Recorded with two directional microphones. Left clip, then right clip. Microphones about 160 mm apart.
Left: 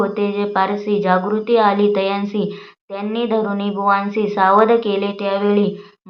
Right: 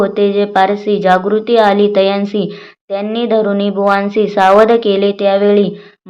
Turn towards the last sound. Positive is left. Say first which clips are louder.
# right 7 dB
turn(degrees=-40)  # may be behind; listen again after turning